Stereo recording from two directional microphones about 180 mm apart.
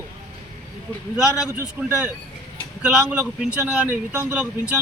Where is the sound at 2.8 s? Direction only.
5° right (ahead or behind).